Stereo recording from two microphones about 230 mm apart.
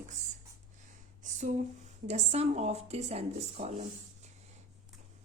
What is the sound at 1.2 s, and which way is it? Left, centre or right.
A woman's voice, right.